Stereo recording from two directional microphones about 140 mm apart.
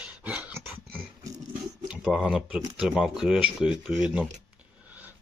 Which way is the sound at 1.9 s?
Centre (ahead or behind).